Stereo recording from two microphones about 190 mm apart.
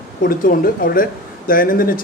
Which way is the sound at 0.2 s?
50° left (ahead or behind).